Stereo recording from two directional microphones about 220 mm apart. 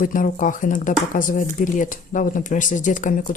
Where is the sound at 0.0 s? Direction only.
35° left (ahead or behind).